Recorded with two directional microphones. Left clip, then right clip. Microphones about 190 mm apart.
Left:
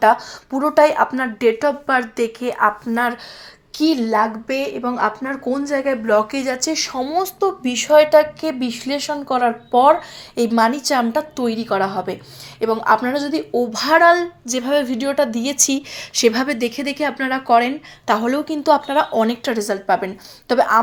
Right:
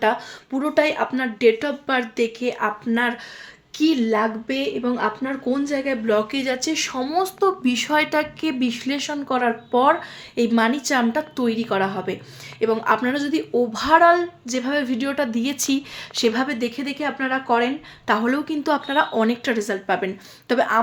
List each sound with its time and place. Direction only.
0.0 s speech: 5° left (ahead or behind)
16.1 s speech: 15° left (ahead or behind)
18.0 s speech: centre (ahead or behind)